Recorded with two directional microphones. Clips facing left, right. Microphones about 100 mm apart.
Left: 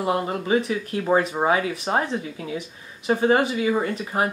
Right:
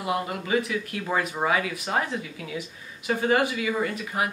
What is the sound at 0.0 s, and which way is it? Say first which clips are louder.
Speech: left 4 dB; 30° left (ahead or behind).